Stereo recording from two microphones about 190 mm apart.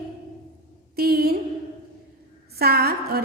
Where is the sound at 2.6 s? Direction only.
55° right (ahead or behind).